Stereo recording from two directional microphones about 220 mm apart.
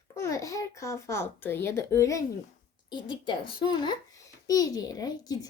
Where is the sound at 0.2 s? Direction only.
15° left (ahead or behind).